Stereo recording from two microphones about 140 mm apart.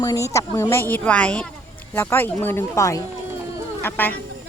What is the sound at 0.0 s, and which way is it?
Speech, 25° left (ahead or behind).